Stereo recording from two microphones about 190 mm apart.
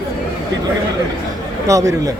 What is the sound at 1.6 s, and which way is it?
Speech, 15° right (ahead or behind).